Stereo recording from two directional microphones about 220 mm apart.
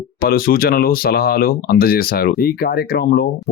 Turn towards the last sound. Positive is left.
turn(degrees=45)  # may be behind; listen again after turning